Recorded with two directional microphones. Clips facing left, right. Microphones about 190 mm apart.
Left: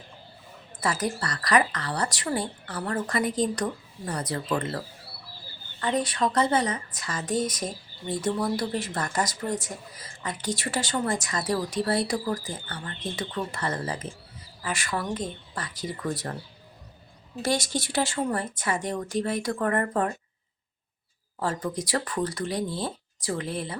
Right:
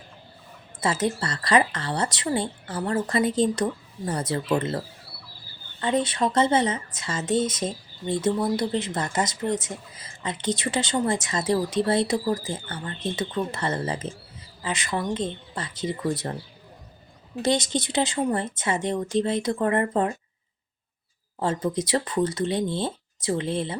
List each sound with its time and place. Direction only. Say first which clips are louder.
0.8 s speech: right 3 dB; 25° right (ahead or behind)
5.8 s speech: right 2 dB; 25° right (ahead or behind)
17.4 s speech: right 3 dB; 20° right (ahead or behind)
21.3 s speech: right 4 dB; 20° right (ahead or behind)